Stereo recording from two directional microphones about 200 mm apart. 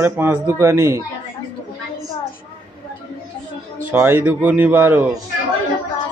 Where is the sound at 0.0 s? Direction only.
10° right (ahead or behind).